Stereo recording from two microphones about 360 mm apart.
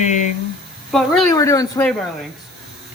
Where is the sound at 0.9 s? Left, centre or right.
Centre.